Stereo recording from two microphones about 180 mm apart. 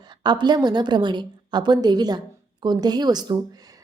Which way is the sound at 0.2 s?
25° right (ahead or behind).